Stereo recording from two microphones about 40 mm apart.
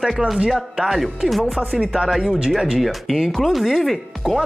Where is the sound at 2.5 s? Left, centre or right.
Centre.